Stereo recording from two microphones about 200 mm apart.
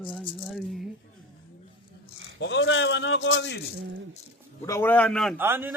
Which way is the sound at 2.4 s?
65° left (ahead or behind).